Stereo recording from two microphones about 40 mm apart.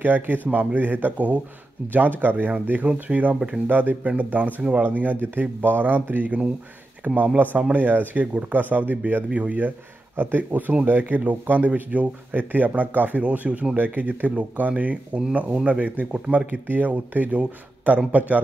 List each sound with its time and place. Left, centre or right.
0.0 s speech: right
1.9 s speech: right
3.6 s speech: right
5.2 s speech: right
7.0 s speech: right
10.1 s speech: right
16.6 s speech: right
16.9 s speech: right